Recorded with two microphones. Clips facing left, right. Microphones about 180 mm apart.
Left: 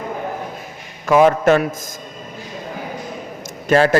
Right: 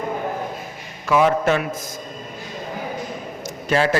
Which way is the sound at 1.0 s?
50° left (ahead or behind).